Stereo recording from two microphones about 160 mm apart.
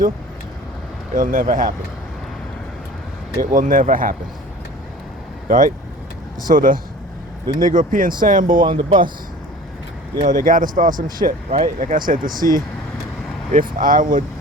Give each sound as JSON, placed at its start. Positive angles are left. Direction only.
{"t": 1.1, "sound": "speech", "side_deg": -60}
{"t": 3.5, "sound": "speech", "side_deg": -55}
{"t": 5.5, "sound": "speech", "side_deg": -55}
{"t": 8.6, "sound": "speech", "side_deg": -30}
{"t": 10.2, "sound": "speech", "side_deg": -55}